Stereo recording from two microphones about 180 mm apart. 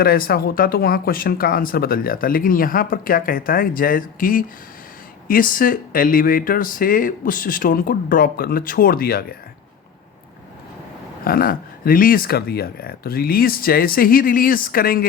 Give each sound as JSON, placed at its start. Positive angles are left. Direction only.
{"t": 0.0, "sound": "speech", "side_deg": 55}
{"t": 11.3, "sound": "speech", "side_deg": 55}